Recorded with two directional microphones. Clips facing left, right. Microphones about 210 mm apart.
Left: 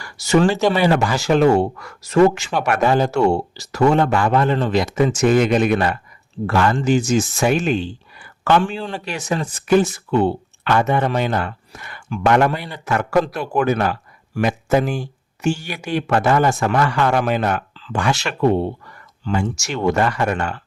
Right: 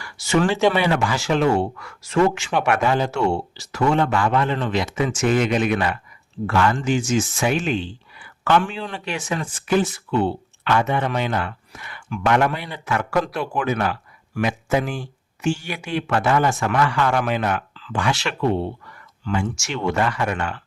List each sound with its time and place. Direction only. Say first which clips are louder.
0.0 s speech: left 4 dB; 40° left (ahead or behind)